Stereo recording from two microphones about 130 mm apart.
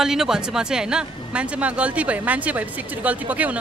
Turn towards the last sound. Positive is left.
turn(degrees=-10)  # may be behind; listen again after turning